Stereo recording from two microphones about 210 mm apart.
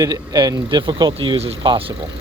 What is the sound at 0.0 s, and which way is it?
Speech, 15° right (ahead or behind).